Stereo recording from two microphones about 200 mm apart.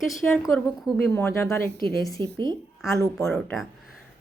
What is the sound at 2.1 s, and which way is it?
Speech, 25° right (ahead or behind).